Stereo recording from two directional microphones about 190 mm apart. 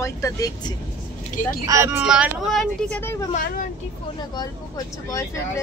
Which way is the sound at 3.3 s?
45° left (ahead or behind).